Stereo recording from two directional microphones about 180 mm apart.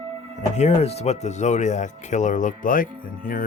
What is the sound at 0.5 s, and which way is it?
Speech, 35° left (ahead or behind).